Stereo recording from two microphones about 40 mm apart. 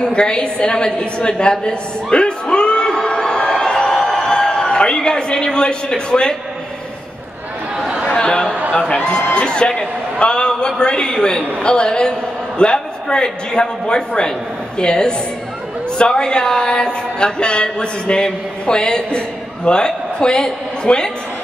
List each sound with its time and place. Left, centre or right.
0.0 s speech: left
2.5 s a sound: left
8.2 s a man's voice: left